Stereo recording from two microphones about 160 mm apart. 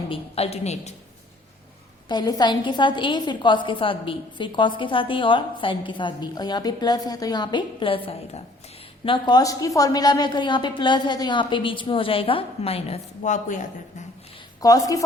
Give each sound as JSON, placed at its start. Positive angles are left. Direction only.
{"t": 0.1, "sound": "a woman's voice", "side_deg": 40}
{"t": 2.0, "sound": "a woman's voice", "side_deg": 25}
{"t": 14.6, "sound": "a woman's voice", "side_deg": 20}